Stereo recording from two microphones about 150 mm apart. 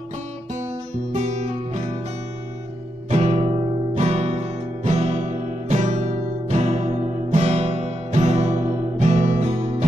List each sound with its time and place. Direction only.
1.1 s music: 50° right (ahead or behind)
3.1 s music: 45° right (ahead or behind)
3.9 s guitar: 45° right (ahead or behind)
5.7 s music: 50° right (ahead or behind)